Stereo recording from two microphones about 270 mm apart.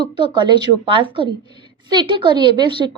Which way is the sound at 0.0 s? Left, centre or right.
Centre.